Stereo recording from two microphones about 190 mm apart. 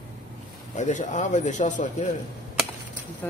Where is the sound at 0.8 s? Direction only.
40° left (ahead or behind).